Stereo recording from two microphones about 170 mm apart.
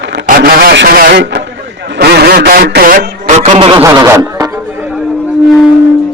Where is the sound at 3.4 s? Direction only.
35° right (ahead or behind).